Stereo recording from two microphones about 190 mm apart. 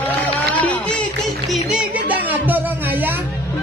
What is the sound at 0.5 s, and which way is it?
Music, 5° left (ahead or behind).